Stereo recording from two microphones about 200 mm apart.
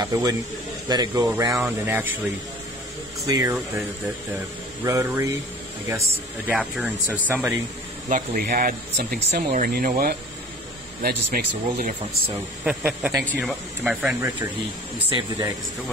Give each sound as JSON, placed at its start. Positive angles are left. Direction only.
{"t": 0.1, "sound": "a man's voice", "side_deg": -20}
{"t": 1.5, "sound": "speech", "side_deg": -5}
{"t": 3.3, "sound": "speech", "side_deg": -15}
{"t": 4.8, "sound": "speech", "side_deg": -15}
{"t": 8.1, "sound": "speech", "side_deg": -45}
{"t": 12.6, "sound": "speech", "side_deg": -5}
{"t": 15.0, "sound": "a man's voice", "side_deg": -20}